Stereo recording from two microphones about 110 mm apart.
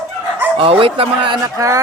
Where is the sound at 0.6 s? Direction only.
55° right (ahead or behind).